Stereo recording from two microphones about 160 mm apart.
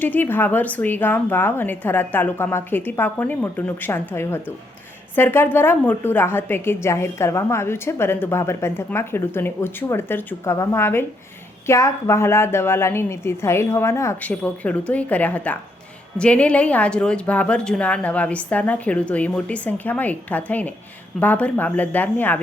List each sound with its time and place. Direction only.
0.0 s a woman's voice: 10° left (ahead or behind)